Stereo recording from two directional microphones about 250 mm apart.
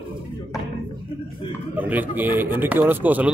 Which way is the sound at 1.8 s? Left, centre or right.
Centre.